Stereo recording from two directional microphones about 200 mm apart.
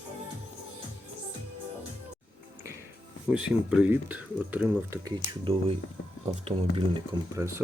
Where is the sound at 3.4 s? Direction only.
5° right (ahead or behind).